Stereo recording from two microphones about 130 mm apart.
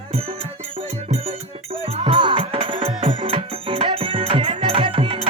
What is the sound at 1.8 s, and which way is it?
Music, 45° right (ahead or behind).